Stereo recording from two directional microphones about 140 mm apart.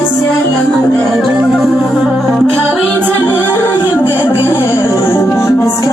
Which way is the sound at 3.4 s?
15° left (ahead or behind).